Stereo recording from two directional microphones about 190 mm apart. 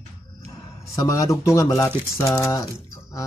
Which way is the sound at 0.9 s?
15° left (ahead or behind).